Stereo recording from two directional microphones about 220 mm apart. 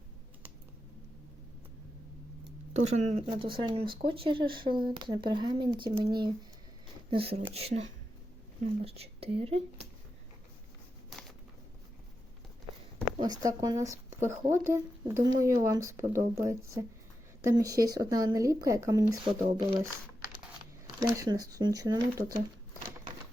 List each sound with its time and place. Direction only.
2.8 s speech: 30° right (ahead or behind)
13.1 s speech: 20° right (ahead or behind)